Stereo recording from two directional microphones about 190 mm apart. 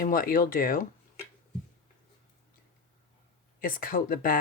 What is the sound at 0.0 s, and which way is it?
Speech, 50° left (ahead or behind).